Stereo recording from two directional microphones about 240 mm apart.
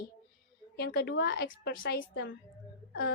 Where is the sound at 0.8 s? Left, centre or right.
Left.